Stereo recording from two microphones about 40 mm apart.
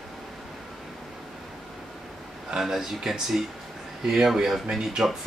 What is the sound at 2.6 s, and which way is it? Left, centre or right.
Speech, centre.